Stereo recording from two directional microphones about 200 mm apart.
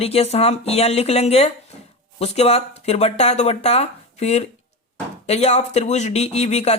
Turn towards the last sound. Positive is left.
turn(degrees=35)  # may be behind; listen again after turning